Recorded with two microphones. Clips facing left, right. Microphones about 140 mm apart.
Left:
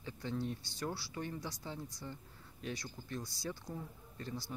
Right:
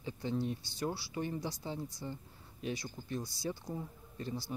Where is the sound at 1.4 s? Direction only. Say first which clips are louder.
Right 5 dB; 30° right (ahead or behind).